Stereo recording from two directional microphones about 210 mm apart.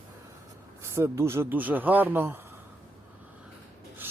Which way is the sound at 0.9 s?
10° right (ahead or behind).